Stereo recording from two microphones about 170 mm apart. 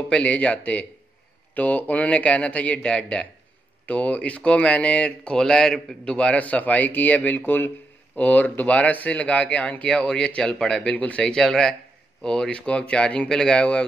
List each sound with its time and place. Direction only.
0.1 s speech: 5° left (ahead or behind)